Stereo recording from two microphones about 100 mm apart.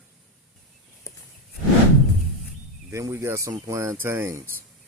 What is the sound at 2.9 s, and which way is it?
Speech, 30° right (ahead or behind).